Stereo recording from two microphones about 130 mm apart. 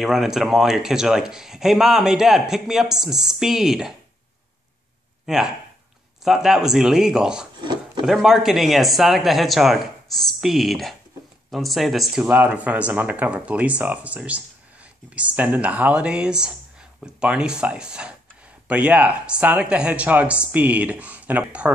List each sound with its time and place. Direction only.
0.0 s speech: 5° right (ahead or behind)
5.2 s speech: 5° right (ahead or behind)
7.6 s wood: 35° right (ahead or behind)
8.0 s speech: 5° right (ahead or behind)